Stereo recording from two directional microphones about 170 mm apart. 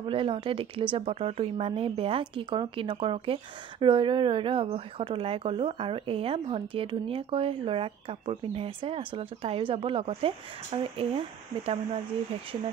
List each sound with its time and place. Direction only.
0.0 s speech: 30° right (ahead or behind)